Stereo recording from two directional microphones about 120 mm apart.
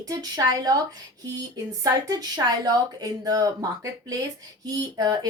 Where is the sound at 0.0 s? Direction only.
35° right (ahead or behind).